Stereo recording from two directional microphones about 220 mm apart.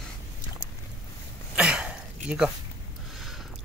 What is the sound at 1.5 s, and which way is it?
Throat clearing, 5° right (ahead or behind).